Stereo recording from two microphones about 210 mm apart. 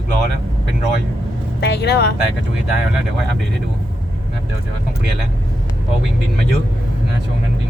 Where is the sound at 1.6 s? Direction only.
50° left (ahead or behind).